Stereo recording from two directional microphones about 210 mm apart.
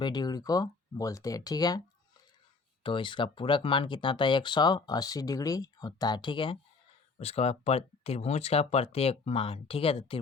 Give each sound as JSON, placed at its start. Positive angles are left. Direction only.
{"t": 0.0, "sound": "speech", "side_deg": 20}
{"t": 2.8, "sound": "speech", "side_deg": 25}